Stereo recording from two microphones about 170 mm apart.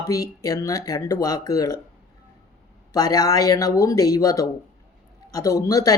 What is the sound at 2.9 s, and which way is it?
Speech, 20° left (ahead or behind).